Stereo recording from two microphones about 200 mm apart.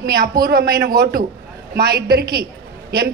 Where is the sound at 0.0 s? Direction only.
50° right (ahead or behind).